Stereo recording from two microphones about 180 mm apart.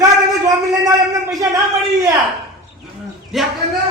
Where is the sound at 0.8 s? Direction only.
20° right (ahead or behind).